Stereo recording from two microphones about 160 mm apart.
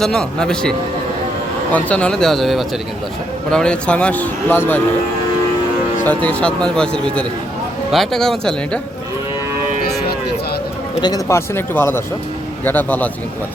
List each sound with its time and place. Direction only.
0.0 s speech: 5° left (ahead or behind)
1.7 s speech: 10° left (ahead or behind)
6.0 s speech: 10° left (ahead or behind)
10.9 s speech: 20° left (ahead or behind)